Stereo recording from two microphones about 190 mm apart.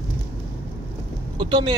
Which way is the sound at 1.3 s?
25° right (ahead or behind).